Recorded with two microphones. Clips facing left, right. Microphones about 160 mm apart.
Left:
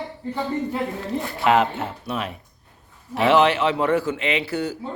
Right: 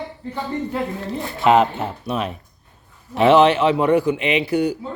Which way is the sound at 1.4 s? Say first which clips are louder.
Right 4 dB; 20° right (ahead or behind).